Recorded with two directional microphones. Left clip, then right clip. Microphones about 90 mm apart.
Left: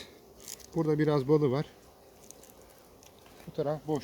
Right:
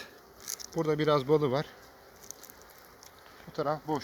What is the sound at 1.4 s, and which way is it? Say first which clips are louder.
Speech: even; 90° left.